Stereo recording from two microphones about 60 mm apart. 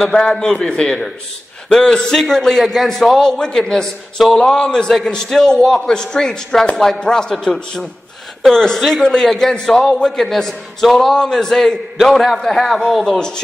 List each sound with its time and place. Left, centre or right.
0.1 s a man's voice: centre